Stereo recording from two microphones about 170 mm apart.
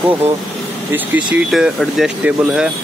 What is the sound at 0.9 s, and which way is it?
Speech, 10° right (ahead or behind).